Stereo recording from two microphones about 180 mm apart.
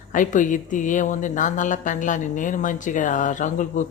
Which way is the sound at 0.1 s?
45° left (ahead or behind).